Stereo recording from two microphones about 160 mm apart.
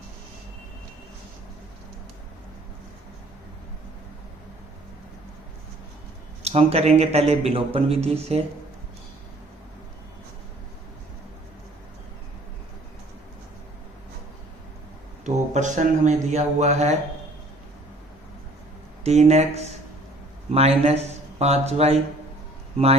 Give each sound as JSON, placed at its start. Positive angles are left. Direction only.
{"t": 6.4, "sound": "speech", "side_deg": -40}
{"t": 15.2, "sound": "a man's voice", "side_deg": -50}
{"t": 19.0, "sound": "a man's voice", "side_deg": -45}